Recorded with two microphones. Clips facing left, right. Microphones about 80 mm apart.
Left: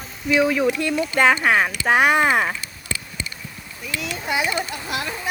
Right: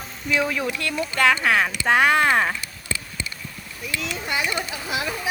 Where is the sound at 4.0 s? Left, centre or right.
Centre.